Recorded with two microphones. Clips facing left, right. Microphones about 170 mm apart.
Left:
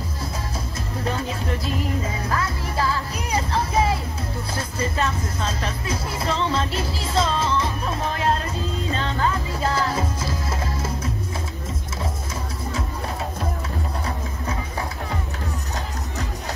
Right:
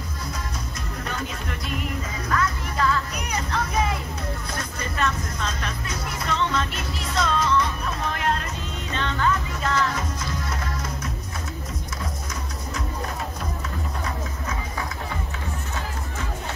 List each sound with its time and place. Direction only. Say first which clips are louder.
1.0 s music: left 6 dB; 30° left (ahead or behind)
4.6 s speech: left 4 dB; 30° left (ahead or behind)
8.9 s music: right 2 dB; 35° left (ahead or behind)